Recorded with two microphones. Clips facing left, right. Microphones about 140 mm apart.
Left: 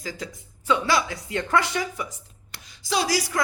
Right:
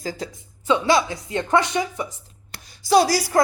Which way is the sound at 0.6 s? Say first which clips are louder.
Right 4 dB; 25° right (ahead or behind).